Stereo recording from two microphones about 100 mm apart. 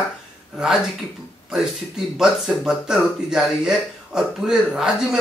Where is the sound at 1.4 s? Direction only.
Centre (ahead or behind).